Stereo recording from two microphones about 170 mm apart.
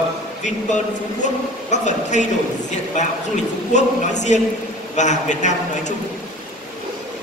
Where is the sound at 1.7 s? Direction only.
45° left (ahead or behind).